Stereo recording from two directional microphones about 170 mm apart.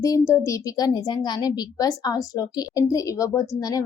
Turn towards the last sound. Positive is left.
turn(degrees=20)  # may be behind; listen again after turning